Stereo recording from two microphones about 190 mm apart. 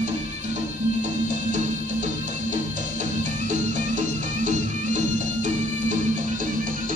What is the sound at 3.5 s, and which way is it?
Music, 40° right (ahead or behind).